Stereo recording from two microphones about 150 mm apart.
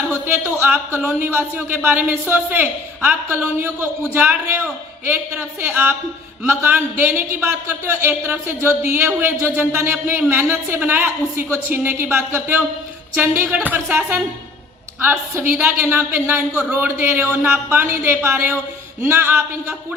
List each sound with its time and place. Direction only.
0.6 s speech: 15° right (ahead or behind)